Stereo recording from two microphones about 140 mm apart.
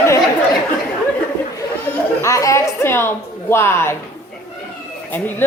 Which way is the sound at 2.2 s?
20° left (ahead or behind).